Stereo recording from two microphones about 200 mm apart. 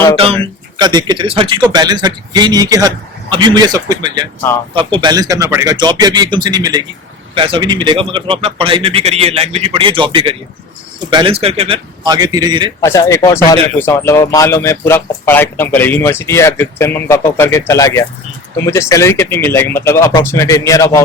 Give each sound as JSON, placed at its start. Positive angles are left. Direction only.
{"t": 0.8, "sound": "a man's voice", "side_deg": -20}
{"t": 12.8, "sound": "speech", "side_deg": 15}